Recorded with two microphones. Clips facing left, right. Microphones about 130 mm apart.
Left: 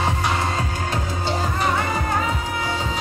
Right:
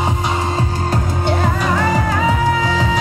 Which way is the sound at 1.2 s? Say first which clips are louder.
Right 4 dB; 75° right (ahead or behind).